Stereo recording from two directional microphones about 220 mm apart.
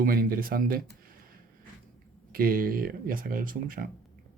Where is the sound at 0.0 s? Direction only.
40° right (ahead or behind).